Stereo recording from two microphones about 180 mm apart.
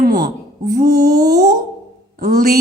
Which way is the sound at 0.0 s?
60° right (ahead or behind).